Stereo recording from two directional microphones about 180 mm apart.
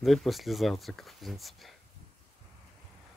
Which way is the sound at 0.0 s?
Centre (ahead or behind).